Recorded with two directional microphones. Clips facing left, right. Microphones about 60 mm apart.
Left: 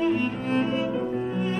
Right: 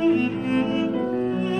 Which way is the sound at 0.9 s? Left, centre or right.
Left.